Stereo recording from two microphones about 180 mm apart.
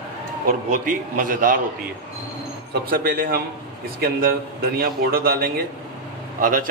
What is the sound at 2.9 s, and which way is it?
A man's voice, 50° right (ahead or behind).